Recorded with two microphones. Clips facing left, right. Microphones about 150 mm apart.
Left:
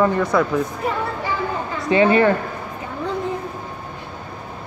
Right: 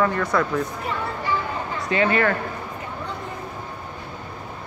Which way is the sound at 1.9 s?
25° left (ahead or behind).